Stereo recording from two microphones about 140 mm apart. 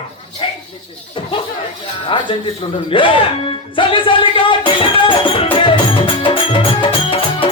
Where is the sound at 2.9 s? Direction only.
35° left (ahead or behind).